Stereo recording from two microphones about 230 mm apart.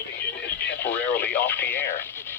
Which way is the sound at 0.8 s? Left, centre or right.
Centre.